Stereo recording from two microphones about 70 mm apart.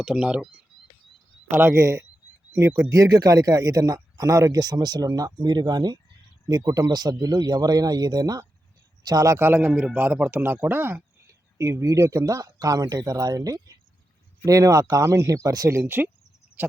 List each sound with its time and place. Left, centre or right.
0.0 s speech: centre
1.5 s speech: right
2.9 s speech: right
6.5 s speech: right
9.0 s speech: right
9.4 s a man's voice: right
11.5 s speech: right
12.2 s speech: right
15.1 s speech: right
15.7 s speech: right